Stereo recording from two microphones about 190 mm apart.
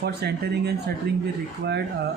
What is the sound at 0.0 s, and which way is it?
Speech, 60° right (ahead or behind).